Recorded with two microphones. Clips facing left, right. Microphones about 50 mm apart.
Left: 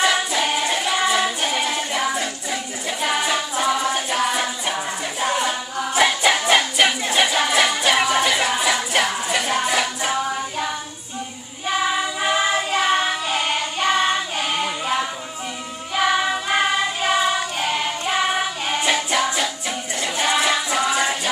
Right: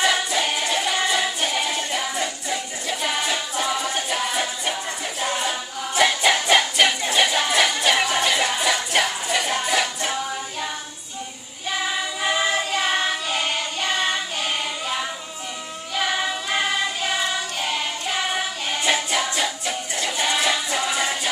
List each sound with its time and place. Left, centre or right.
0.0 s music: centre
2.1 s a capella: centre
5.2 s music: centre
11.9 s choir: centre
12.4 s music: centre
15.9 s child singing: centre
18.9 s music: centre